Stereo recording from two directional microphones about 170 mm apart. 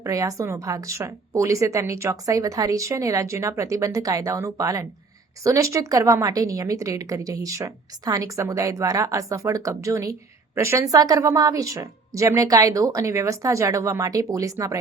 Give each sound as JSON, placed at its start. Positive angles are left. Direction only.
{"t": 0.0, "sound": "a woman's voice", "side_deg": -20}